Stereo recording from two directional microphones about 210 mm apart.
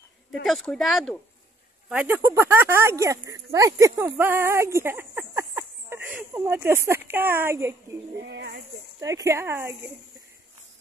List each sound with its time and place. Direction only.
0.3 s speech: centre (ahead or behind)
8.2 s speech: 55° right (ahead or behind)
9.0 s speech: 15° right (ahead or behind)